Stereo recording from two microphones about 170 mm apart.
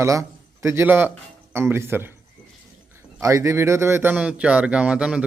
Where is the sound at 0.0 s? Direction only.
15° right (ahead or behind).